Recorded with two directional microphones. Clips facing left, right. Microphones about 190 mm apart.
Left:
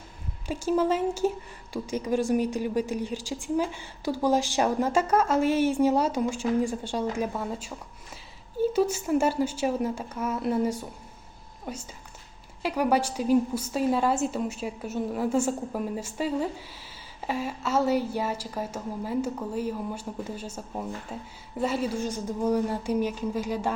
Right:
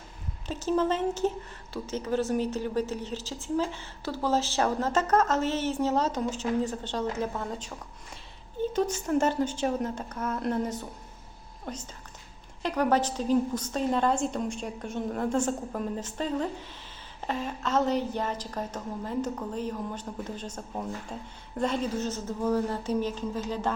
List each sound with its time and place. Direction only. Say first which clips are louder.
0.4 s a woman's voice: left 2 dB; 10° left (ahead or behind)